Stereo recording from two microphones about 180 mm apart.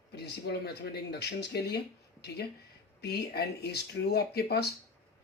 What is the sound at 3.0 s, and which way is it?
Speech, 65° left (ahead or behind).